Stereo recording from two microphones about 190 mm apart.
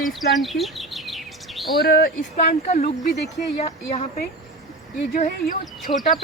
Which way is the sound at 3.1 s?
60° left (ahead or behind).